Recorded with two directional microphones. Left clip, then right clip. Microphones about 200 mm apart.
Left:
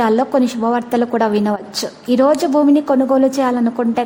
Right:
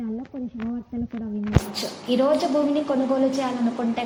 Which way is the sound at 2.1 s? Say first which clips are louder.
Left 7 dB; 45° left (ahead or behind).